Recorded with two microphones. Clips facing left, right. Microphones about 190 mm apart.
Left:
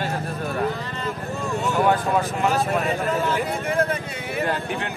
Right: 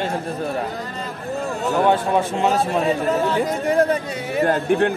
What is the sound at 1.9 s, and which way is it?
A man's voice, 30° right (ahead or behind).